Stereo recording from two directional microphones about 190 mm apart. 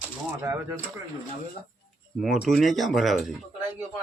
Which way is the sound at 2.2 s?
Centre (ahead or behind).